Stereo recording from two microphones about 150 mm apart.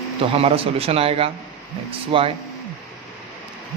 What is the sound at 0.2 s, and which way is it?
Speech, 40° right (ahead or behind).